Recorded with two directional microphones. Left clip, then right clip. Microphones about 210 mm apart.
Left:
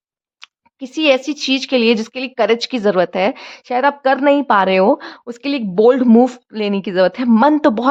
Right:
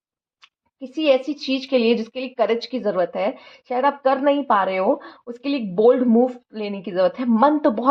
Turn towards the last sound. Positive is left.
turn(degrees=35)  # may be behind; listen again after turning